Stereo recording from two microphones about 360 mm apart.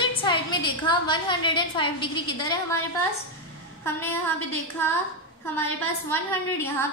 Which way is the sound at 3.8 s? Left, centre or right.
Centre.